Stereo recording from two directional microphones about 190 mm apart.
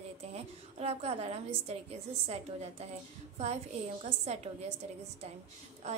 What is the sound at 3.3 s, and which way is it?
A woman's voice, 35° right (ahead or behind).